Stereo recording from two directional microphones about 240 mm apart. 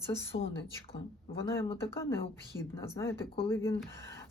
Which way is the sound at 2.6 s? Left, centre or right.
Centre.